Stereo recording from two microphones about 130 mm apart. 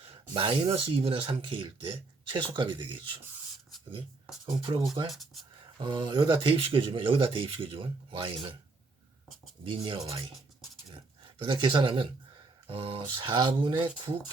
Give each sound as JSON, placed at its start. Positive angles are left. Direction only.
{"t": 0.0, "sound": "a sound", "side_deg": -40}
{"t": 0.9, "sound": "speech", "side_deg": -45}
{"t": 4.4, "sound": "speech", "side_deg": -40}
{"t": 5.1, "sound": "speech", "side_deg": 0}
{"t": 5.7, "sound": "speech", "side_deg": -35}
{"t": 9.6, "sound": "speech", "side_deg": -40}
{"t": 11.3, "sound": "speech", "side_deg": -40}